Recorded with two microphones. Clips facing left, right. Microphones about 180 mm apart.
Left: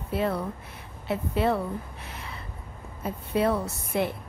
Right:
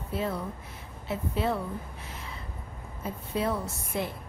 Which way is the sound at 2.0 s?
65° left (ahead or behind).